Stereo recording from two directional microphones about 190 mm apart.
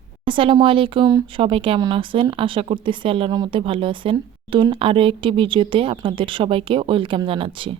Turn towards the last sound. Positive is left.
turn(degrees=-25)  # may be behind; listen again after turning